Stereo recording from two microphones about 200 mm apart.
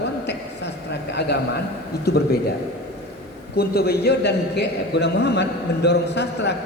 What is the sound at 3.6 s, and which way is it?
A man's voice, 50° left (ahead or behind).